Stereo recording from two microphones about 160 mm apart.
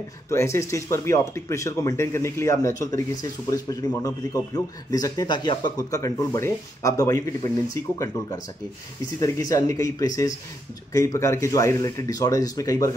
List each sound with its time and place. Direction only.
0.3 s speech: 15° left (ahead or behind)
9.2 s speech: 20° left (ahead or behind)